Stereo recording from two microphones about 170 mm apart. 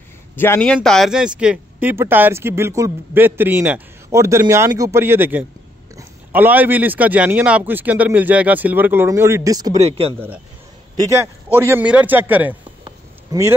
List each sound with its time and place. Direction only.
0.4 s speech: 10° left (ahead or behind); by 9.8 s 20° right (ahead or behind)
9.8 s speech: 35° right (ahead or behind)
11.0 s speech: 15° right (ahead or behind)
12.8 s a sound: 20° right (ahead or behind)